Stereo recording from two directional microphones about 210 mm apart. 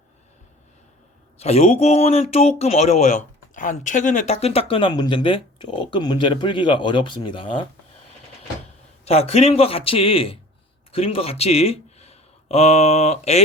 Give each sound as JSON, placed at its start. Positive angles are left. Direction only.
{"t": 1.4, "sound": "a man's voice", "side_deg": 30}
{"t": 9.0, "sound": "a man's voice", "side_deg": 30}